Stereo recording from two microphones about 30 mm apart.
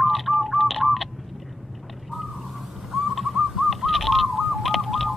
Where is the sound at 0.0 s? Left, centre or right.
Centre.